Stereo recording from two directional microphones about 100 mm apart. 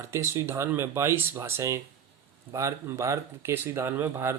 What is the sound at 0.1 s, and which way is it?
Speech, 25° right (ahead or behind).